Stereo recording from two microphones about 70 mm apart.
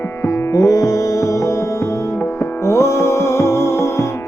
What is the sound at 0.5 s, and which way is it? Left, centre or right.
Music, left.